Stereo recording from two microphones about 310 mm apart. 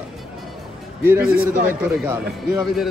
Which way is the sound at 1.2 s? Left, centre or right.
Right.